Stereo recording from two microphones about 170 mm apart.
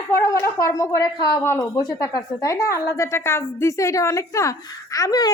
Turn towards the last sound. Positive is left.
turn(degrees=20)  # may be behind; listen again after turning